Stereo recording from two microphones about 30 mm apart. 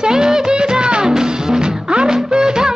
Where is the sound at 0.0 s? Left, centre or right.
Right.